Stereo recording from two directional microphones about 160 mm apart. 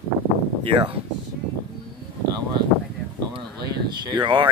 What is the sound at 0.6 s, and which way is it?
Speech, 35° right (ahead or behind).